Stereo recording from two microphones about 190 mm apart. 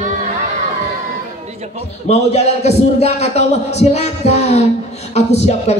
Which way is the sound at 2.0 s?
35° left (ahead or behind).